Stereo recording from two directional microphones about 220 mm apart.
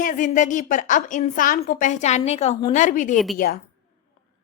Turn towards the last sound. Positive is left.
turn(degrees=40)  # may be behind; listen again after turning